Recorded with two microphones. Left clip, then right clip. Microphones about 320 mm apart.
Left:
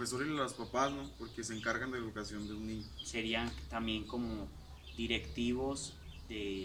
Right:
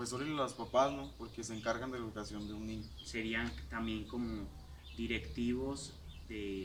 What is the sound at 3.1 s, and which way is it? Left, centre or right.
Speech, centre.